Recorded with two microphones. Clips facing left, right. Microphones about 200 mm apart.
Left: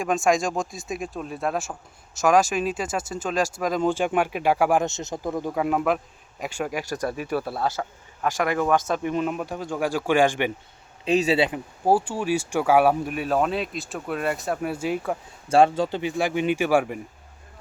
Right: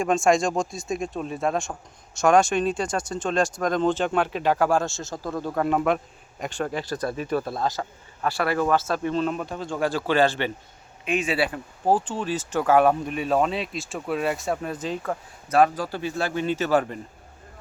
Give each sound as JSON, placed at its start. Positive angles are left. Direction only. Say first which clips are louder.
{"t": 0.0, "sound": "speech", "louder": "right 2 dB", "side_deg": 0}
{"t": 11.0, "sound": "speech", "louder": "left 4 dB", "side_deg": 25}
{"t": 11.9, "sound": "speech", "louder": "left 2 dB", "side_deg": 10}
{"t": 15.4, "sound": "speech", "louder": "left 2 dB", "side_deg": 30}